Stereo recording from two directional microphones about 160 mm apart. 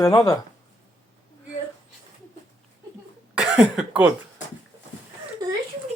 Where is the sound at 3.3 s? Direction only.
5° right (ahead or behind).